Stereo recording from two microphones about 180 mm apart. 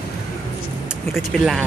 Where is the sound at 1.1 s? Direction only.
Centre (ahead or behind).